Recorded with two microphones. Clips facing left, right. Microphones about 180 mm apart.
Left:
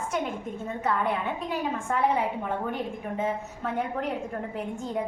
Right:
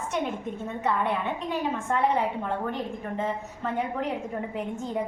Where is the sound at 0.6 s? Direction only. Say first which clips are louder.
Even; centre (ahead or behind).